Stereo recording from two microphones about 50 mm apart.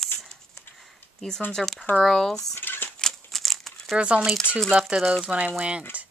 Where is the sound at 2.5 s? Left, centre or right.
Left.